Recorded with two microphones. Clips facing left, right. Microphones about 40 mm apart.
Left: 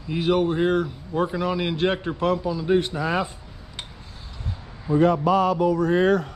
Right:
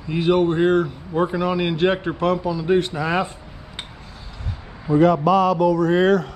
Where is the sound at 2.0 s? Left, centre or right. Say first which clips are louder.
Right 3 dB; right.